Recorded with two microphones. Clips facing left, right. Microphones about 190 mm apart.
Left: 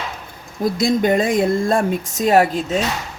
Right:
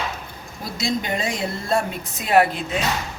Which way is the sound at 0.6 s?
50° left (ahead or behind).